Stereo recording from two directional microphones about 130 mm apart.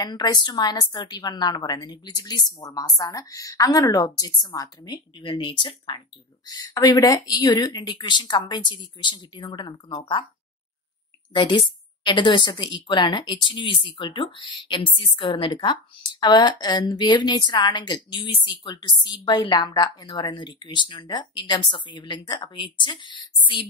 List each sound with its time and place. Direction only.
0.0 s a woman's voice: 35° left (ahead or behind)
11.3 s a woman's voice: 40° left (ahead or behind)